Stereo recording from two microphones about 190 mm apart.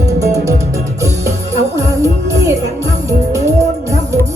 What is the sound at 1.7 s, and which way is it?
Music, 15° right (ahead or behind).